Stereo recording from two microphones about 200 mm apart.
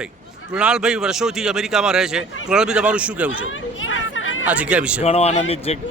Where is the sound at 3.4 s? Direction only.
75° left (ahead or behind).